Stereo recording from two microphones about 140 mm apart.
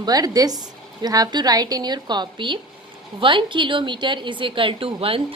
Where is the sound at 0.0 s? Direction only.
25° right (ahead or behind).